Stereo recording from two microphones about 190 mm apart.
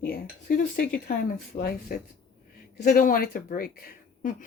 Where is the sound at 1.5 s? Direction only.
35° left (ahead or behind).